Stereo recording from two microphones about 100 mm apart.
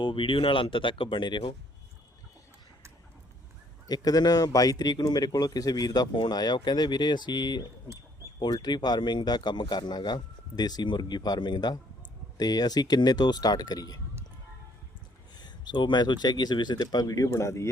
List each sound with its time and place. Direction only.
0.0 s speech: 60° left (ahead or behind)
3.8 s a man's voice: 40° left (ahead or behind)
15.4 s speech: 45° left (ahead or behind); by 17.7 s 30° left (ahead or behind)